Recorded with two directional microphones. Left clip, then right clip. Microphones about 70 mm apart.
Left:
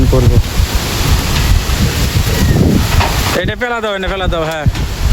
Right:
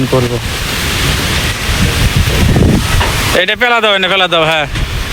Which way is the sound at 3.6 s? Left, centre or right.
Centre.